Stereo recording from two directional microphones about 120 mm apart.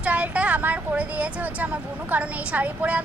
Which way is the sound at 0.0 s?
10° right (ahead or behind).